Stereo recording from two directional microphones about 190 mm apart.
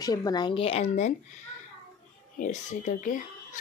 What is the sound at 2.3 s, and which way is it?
Speech, 40° left (ahead or behind).